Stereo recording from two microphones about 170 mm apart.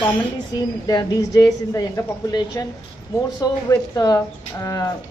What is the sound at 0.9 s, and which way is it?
A woman's voice, 20° left (ahead or behind).